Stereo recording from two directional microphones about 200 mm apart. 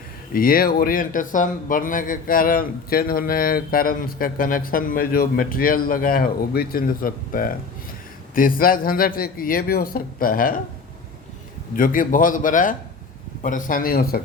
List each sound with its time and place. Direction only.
0.3 s speech: 45° left (ahead or behind)
11.8 s a man's voice: 45° left (ahead or behind)